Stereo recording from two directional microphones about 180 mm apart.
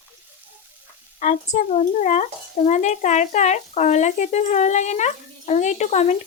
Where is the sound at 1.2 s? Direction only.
45° left (ahead or behind).